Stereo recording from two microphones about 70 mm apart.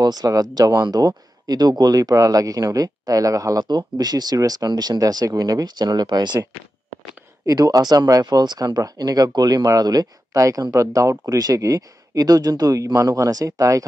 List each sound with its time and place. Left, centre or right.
0.0 s speech: right
3.6 s speech: right
7.4 s speech: right